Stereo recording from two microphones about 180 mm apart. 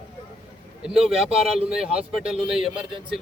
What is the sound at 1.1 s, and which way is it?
Speech, 35° right (ahead or behind).